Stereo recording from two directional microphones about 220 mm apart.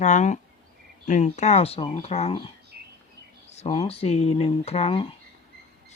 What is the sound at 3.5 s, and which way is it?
Speech, 30° left (ahead or behind).